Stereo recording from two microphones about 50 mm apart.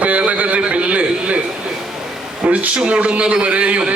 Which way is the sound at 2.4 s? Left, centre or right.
Right.